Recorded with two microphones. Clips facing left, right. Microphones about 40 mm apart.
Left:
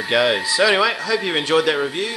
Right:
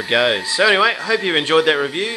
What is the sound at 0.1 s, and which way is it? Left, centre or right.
Speech, centre.